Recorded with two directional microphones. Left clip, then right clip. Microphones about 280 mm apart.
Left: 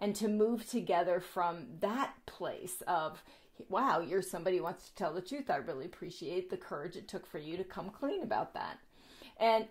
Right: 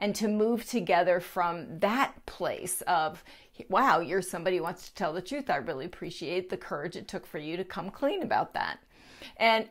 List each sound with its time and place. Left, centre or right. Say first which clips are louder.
0.0 s a woman's voice: right 4 dB; centre